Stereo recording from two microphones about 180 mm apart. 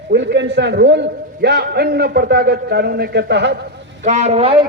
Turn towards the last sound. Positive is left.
turn(degrees=-30)  # may be behind; listen again after turning